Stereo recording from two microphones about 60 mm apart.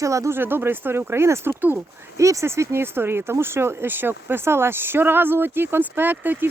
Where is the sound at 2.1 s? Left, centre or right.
Right.